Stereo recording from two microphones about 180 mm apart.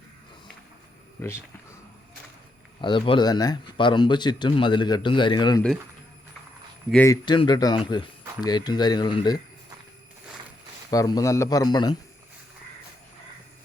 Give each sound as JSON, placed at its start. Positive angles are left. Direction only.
{"t": 2.8, "sound": "speech", "side_deg": 25}
{"t": 6.9, "sound": "speech", "side_deg": 15}
{"t": 7.3, "sound": "speech", "side_deg": 25}
{"t": 10.9, "sound": "speech", "side_deg": 20}